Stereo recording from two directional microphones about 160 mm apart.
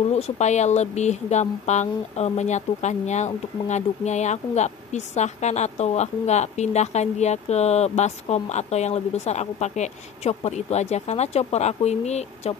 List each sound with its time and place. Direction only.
0.1 s speech: 45° left (ahead or behind)